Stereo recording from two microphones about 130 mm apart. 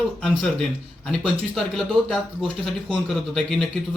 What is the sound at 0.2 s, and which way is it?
Speech, 5° left (ahead or behind).